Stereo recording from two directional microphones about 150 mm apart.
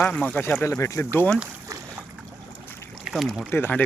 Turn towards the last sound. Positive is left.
turn(degrees=15)  # may be behind; listen again after turning